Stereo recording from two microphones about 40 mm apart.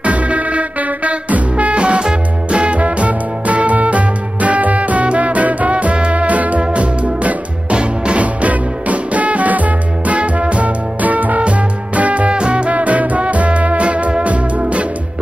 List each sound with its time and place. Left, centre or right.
0.0 s music: right